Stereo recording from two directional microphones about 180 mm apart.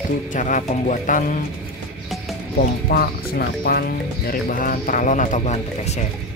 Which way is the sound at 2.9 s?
60° left (ahead or behind).